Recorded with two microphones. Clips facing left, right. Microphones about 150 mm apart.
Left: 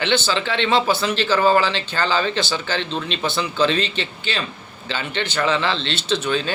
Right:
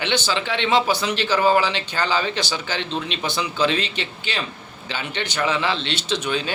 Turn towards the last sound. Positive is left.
turn(degrees=-10)  # may be behind; listen again after turning